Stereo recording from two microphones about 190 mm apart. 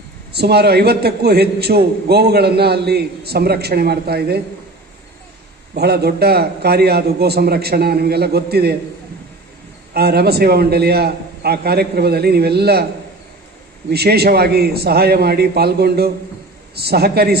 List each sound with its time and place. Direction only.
0.3 s a man's voice: 60° right (ahead or behind)
5.7 s a man's voice: 55° right (ahead or behind)
9.9 s a man's voice: 55° right (ahead or behind)
13.9 s a man's voice: 55° right (ahead or behind)